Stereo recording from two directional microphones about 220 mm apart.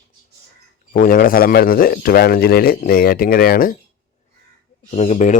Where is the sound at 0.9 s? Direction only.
40° left (ahead or behind).